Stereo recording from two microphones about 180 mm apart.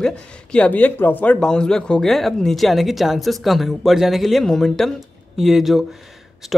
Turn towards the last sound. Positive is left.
turn(degrees=0)  # may be behind; listen again after turning